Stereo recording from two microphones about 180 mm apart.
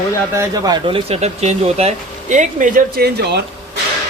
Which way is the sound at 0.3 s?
20° right (ahead or behind).